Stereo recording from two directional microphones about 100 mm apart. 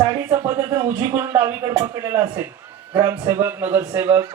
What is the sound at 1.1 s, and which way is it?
A man's voice, 25° right (ahead or behind).